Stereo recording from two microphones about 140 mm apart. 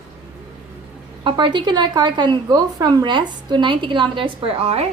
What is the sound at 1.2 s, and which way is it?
A woman's voice, 35° right (ahead or behind).